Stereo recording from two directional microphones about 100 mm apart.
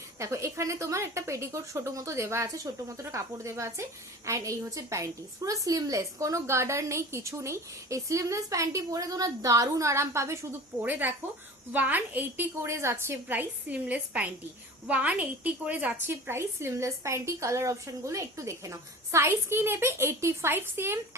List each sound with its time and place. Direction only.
0.2 s a woman's voice: 30° right (ahead or behind)
11.7 s a woman's voice: 15° right (ahead or behind)
12.6 s a woman's voice: 30° right (ahead or behind)